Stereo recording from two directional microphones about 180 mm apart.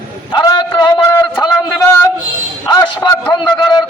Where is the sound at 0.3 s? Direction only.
25° left (ahead or behind).